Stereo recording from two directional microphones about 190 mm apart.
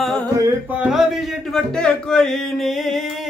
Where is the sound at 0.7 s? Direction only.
5° right (ahead or behind).